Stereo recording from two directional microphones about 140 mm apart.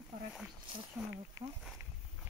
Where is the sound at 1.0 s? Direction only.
Centre (ahead or behind).